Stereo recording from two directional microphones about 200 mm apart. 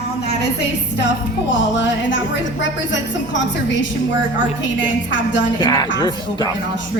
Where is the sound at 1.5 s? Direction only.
65° left (ahead or behind).